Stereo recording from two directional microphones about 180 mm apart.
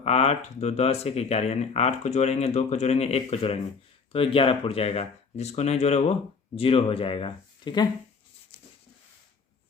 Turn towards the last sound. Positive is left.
turn(degrees=25)  # may be behind; listen again after turning